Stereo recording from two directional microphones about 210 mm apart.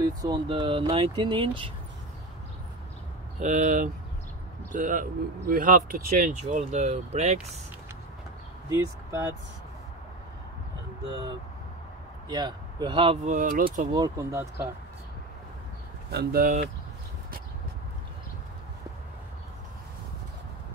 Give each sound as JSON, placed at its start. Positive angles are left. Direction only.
{"t": 0.0, "sound": "speech", "side_deg": -20}
{"t": 3.3, "sound": "speech", "side_deg": -35}
{"t": 8.6, "sound": "speech", "side_deg": -10}
{"t": 12.3, "sound": "speech", "side_deg": -20}
{"t": 13.9, "sound": "speech", "side_deg": -15}
{"t": 16.1, "sound": "speech", "side_deg": -50}